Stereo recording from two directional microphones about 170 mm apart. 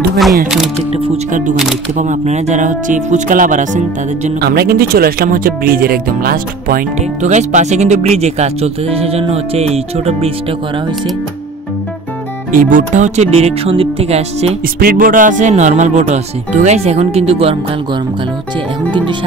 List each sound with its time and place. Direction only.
0.9 s speech: 30° right (ahead or behind)
2.0 s speech: 45° right (ahead or behind)
4.4 s speech: 65° right (ahead or behind); by 10.3 s 35° right (ahead or behind)
12.5 s speech: 50° right (ahead or behind)
14.8 s speech: 60° right (ahead or behind); by 17.6 s 35° right (ahead or behind)
18.9 s speech: 30° right (ahead or behind)